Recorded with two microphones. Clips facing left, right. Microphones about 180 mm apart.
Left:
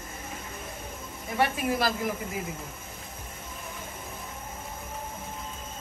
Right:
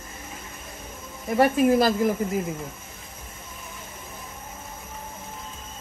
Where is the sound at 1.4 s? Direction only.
40° right (ahead or behind).